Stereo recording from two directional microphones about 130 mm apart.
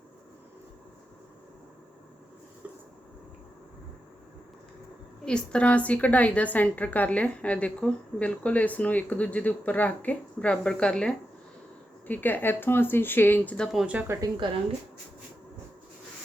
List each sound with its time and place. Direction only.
5.2 s a woman's voice: 5° left (ahead or behind)
13.7 s speech: 10° right (ahead or behind)